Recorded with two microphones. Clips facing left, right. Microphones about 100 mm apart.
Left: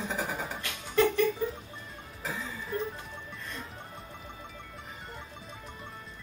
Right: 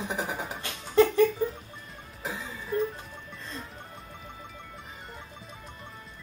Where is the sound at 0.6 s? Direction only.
30° right (ahead or behind).